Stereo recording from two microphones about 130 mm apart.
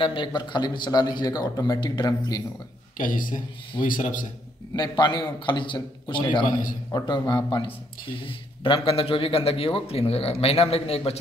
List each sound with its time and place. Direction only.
0.0 s speech: 40° left (ahead or behind)
3.0 s a man's voice: 90° left
4.7 s speech: 35° left (ahead or behind); by 11.1 s 50° left (ahead or behind)